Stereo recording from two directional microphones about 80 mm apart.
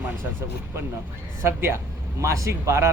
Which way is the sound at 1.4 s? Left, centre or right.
Right.